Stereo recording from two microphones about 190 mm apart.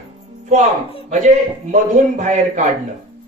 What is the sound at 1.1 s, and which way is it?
A man's voice, 40° right (ahead or behind).